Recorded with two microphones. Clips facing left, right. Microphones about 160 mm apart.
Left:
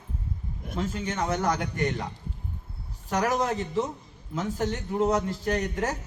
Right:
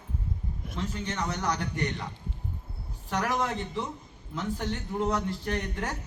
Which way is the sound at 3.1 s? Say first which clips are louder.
Left 3 dB; 45° left (ahead or behind).